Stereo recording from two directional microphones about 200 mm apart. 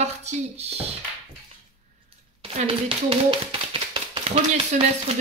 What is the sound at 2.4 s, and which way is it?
Speech, 30° right (ahead or behind).